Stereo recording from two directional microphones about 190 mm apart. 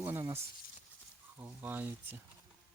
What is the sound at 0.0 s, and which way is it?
Speech, 15° right (ahead or behind).